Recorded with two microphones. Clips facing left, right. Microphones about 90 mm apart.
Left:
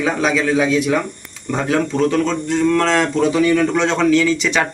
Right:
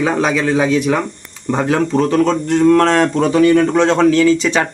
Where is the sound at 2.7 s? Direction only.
45° right (ahead or behind).